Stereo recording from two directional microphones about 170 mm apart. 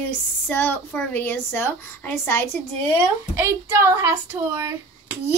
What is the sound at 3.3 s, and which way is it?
Speech, 15° right (ahead or behind).